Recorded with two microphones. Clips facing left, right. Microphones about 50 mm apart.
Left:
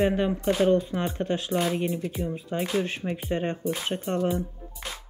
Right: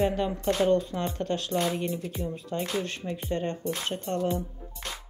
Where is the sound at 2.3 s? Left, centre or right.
Left.